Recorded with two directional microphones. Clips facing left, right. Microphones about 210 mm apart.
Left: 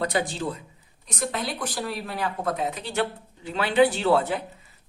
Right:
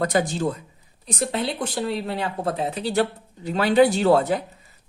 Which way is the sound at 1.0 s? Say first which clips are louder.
Right 4 dB; 30° right (ahead or behind).